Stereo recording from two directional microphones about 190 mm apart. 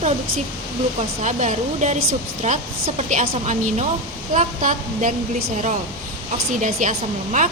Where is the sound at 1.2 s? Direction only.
40° right (ahead or behind).